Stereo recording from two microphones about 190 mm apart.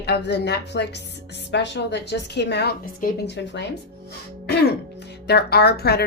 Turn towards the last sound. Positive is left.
turn(degrees=55)  # may be behind; listen again after turning